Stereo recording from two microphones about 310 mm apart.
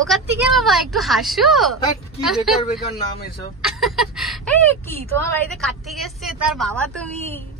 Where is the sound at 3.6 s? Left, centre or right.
Centre.